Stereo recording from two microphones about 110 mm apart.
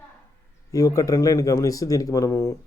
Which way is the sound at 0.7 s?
30° left (ahead or behind).